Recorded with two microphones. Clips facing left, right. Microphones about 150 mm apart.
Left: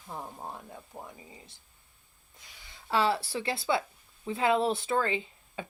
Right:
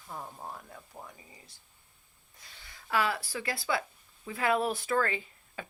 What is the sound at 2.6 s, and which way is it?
Speech, 20° left (ahead or behind).